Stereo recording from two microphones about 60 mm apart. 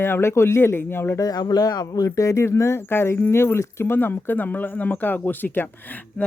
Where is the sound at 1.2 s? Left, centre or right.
Left.